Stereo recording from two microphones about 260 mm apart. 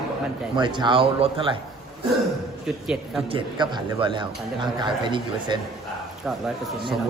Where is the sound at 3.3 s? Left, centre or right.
Centre.